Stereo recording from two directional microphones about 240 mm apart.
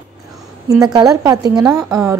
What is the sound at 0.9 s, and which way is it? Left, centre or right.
Speech, centre.